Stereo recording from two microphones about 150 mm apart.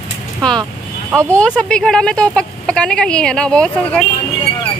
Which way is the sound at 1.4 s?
5° left (ahead or behind).